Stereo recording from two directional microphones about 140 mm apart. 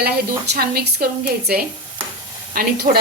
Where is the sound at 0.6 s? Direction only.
90° right.